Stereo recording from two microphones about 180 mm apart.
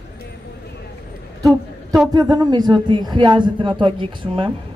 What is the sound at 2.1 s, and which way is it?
Speech, 20° right (ahead or behind).